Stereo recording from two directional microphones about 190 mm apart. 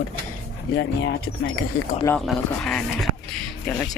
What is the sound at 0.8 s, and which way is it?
Speech, 65° left (ahead or behind).